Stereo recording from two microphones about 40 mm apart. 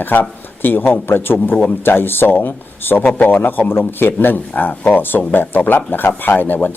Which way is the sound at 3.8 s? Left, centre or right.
Left.